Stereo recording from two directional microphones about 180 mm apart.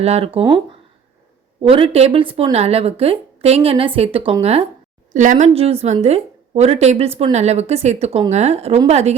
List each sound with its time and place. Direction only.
0.0 s a woman's voice: 35° right (ahead or behind)
1.6 s a woman's voice: 30° right (ahead or behind)
5.1 s a woman's voice: 45° right (ahead or behind)